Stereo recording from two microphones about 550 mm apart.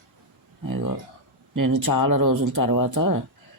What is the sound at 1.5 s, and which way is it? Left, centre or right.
Speech, right.